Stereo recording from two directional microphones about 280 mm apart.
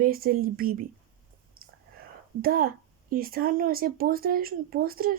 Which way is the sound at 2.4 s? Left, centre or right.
Right.